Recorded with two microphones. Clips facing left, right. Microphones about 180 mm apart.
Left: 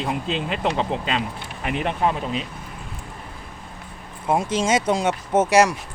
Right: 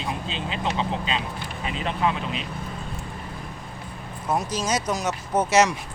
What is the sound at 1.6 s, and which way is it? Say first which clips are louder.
Speech: left 3 dB; 60° left (ahead or behind).